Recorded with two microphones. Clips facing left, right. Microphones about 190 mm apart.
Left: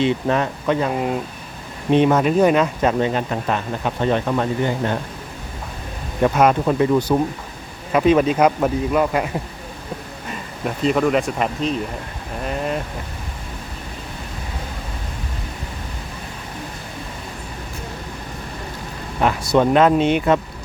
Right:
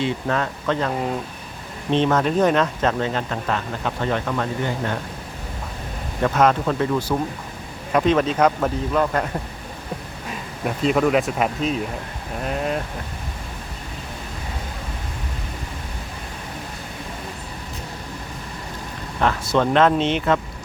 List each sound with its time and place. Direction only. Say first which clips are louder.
0.0 s speech: left 4 dB; 20° left (ahead or behind)
6.2 s speech: left 2 dB; 10° left (ahead or behind)
19.2 s speech: left 3 dB; 15° left (ahead or behind)